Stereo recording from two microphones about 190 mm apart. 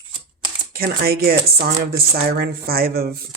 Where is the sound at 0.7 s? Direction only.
55° right (ahead or behind).